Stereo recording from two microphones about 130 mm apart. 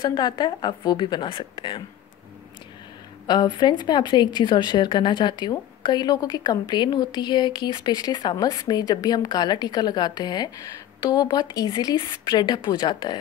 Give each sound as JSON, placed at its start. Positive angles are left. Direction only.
{"t": 0.0, "sound": "a woman's voice", "side_deg": 35}
{"t": 3.3, "sound": "a woman's voice", "side_deg": 35}